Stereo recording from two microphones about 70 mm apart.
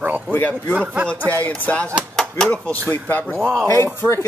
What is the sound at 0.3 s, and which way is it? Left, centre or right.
Speech, left.